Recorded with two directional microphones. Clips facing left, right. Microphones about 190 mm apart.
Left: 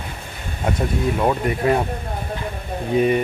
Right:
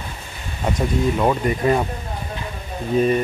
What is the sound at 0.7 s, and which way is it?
Speech, 5° left (ahead or behind).